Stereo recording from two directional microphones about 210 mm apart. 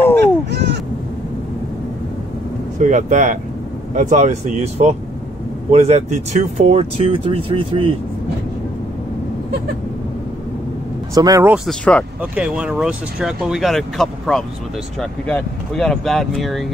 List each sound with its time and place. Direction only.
0.5 s crow: 55° right (ahead or behind)
2.8 s speech: 35° right (ahead or behind)
11.1 s speech: 15° right (ahead or behind)
11.5 s speech: 5° left (ahead or behind)